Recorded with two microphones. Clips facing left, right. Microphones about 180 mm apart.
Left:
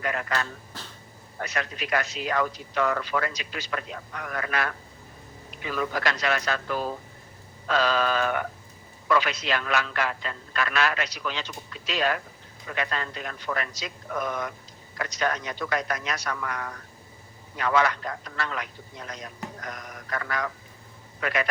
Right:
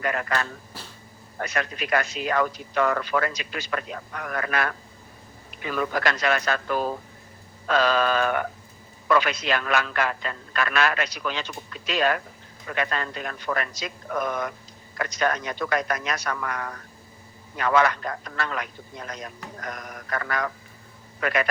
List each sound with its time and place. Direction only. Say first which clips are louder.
0.0 s a man's voice: right 2 dB; 55° right (ahead or behind)
0.7 s dog: even; 10° right (ahead or behind)
1.4 s a man's voice: right 3 dB; 55° right (ahead or behind)